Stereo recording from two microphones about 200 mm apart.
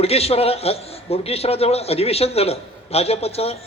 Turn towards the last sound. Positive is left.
turn(degrees=30)  # may be behind; listen again after turning